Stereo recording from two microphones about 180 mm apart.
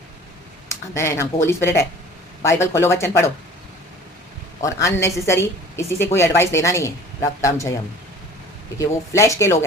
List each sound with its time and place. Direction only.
0.9 s a woman's voice: 15° left (ahead or behind)
4.6 s a woman's voice: 15° left (ahead or behind)
8.8 s a woman's voice: 15° left (ahead or behind)